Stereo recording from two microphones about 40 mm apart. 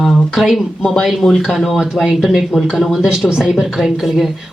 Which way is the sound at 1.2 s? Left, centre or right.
Centre.